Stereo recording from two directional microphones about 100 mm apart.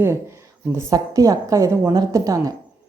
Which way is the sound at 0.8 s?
35° right (ahead or behind).